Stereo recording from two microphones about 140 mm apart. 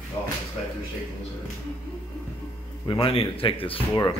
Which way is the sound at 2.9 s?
40° left (ahead or behind).